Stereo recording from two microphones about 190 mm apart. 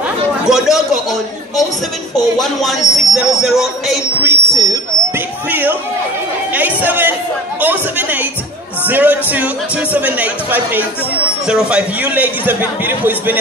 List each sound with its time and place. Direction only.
0.5 s speech: centre (ahead or behind)
2.6 s speech: centre (ahead or behind)
4.3 s speech: 20° right (ahead or behind)
5.5 s a sound: 10° right (ahead or behind)
6.5 s chatter: 10° right (ahead or behind)
8.8 s a man's voice: 10° right (ahead or behind)